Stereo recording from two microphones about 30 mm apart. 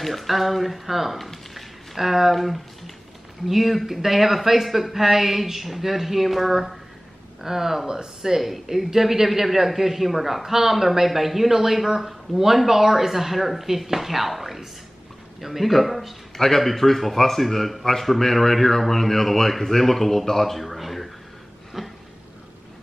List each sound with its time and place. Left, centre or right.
0.0 s speech: centre
1.1 s a man's voice: centre
7.8 s speech: right
8.2 s a man's voice: centre
16.3 s a man's voice: centre
21.8 s a sound: centre